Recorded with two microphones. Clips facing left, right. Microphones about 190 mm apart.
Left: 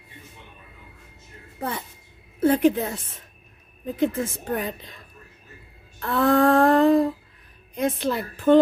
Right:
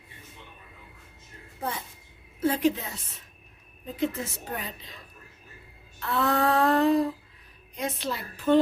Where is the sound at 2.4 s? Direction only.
55° left (ahead or behind).